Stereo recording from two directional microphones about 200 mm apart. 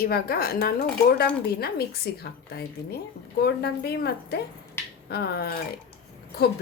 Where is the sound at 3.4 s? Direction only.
55° left (ahead or behind).